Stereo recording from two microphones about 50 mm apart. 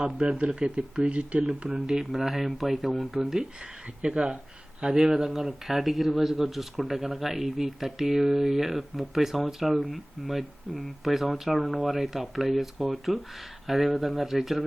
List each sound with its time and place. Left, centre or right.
0.3 s speech: centre
1.9 s speech: centre